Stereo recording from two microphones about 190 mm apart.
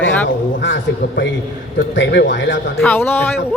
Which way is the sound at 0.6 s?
70° left (ahead or behind).